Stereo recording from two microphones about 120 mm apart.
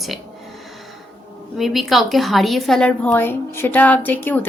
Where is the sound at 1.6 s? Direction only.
Centre (ahead or behind).